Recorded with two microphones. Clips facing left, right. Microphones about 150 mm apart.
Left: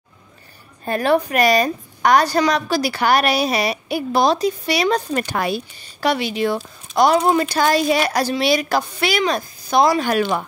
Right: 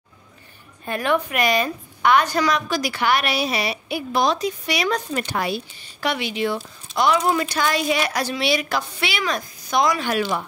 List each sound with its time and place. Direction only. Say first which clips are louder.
0.8 s speech: left 4 dB; 40° left (ahead or behind)
5.1 s speech: left 3 dB; 50° left (ahead or behind)
5.9 s speech: left 4 dB; 35° left (ahead or behind)